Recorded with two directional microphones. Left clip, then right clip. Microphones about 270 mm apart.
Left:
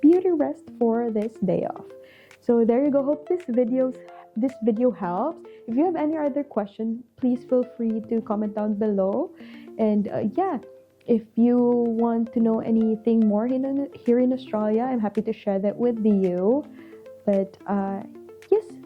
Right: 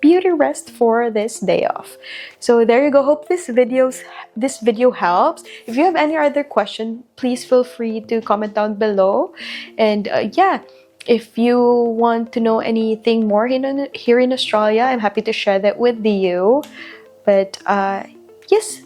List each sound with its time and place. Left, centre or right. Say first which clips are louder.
0.0 s a sound: right 6 dB; centre
0.8 s a woman's voice: right 8 dB; centre
9.0 s speech: right 9 dB; right
9.4 s a woman's voice: right 9 dB; centre
11.5 s speech: right 9 dB; right
12.0 s a woman's voice: right 8 dB; centre
16.3 s a woman's voice: right 8 dB; centre